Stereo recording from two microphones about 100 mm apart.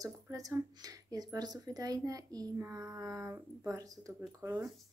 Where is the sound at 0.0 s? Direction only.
35° right (ahead or behind).